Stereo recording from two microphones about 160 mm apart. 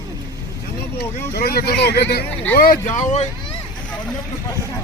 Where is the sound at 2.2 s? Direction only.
10° left (ahead or behind).